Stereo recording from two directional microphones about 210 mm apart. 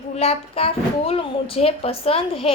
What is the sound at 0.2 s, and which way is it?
A woman's voice, 30° left (ahead or behind).